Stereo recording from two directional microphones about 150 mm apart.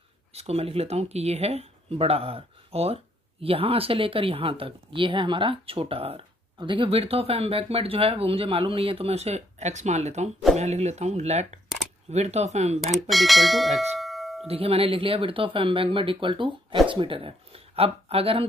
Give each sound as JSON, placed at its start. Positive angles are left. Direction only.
{"t": 0.3, "sound": "speech", "side_deg": -45}
{"t": 13.1, "sound": "speech", "side_deg": 0}
{"t": 14.5, "sound": "speech", "side_deg": -40}